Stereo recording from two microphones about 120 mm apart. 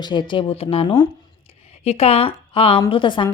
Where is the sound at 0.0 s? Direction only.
40° left (ahead or behind).